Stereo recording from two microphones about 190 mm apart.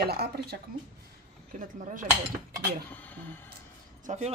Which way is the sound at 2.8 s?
10° left (ahead or behind).